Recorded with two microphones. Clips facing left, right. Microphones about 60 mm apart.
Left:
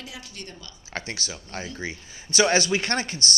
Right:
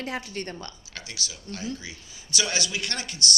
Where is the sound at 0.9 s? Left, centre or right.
Left.